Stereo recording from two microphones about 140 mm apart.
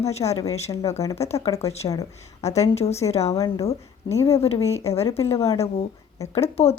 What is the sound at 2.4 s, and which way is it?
A woman's voice, 50° left (ahead or behind).